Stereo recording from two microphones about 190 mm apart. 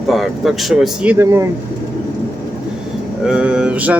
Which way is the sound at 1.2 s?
15° right (ahead or behind).